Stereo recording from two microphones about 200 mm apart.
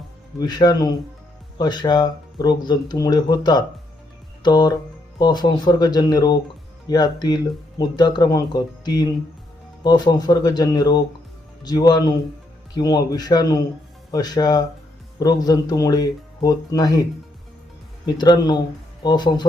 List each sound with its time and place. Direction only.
0.3 s speech: 20° left (ahead or behind)